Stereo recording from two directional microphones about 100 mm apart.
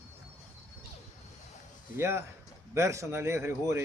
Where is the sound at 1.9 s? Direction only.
25° right (ahead or behind).